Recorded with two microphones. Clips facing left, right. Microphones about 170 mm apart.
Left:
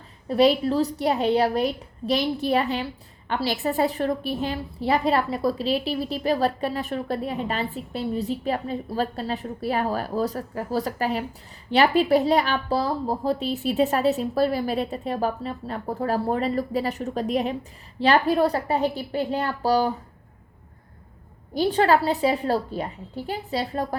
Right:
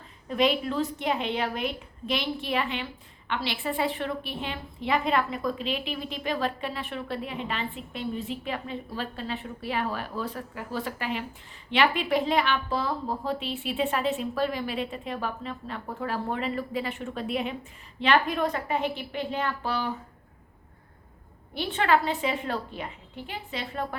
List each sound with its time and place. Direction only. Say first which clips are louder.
0.3 s a woman's voice: left 6 dB; 35° left (ahead or behind)
21.5 s a woman's voice: left 5 dB; 35° left (ahead or behind)